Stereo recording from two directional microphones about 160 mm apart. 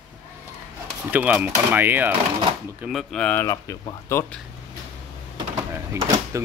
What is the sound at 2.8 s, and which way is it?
Speech, centre (ahead or behind).